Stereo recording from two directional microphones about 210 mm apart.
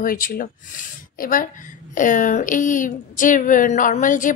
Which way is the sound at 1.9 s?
40° left (ahead or behind).